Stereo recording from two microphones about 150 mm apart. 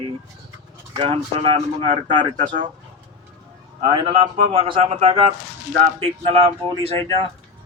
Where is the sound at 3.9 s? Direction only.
35° right (ahead or behind).